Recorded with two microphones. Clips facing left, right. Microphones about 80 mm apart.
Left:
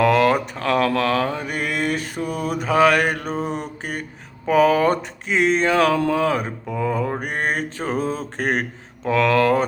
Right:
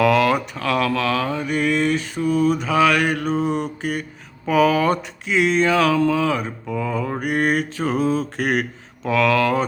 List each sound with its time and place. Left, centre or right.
0.0 s a sound: left
0.5 s mantra: left
4.4 s speech: left
6.0 s mantra: left
6.7 s speech: left
7.2 s speech: left